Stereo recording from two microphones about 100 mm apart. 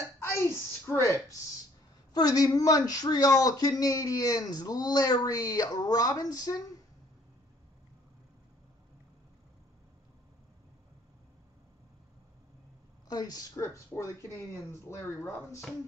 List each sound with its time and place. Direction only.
0.3 s a sound: 25° left (ahead or behind)
2.1 s speech: 40° left (ahead or behind)
13.1 s speech: 40° left (ahead or behind)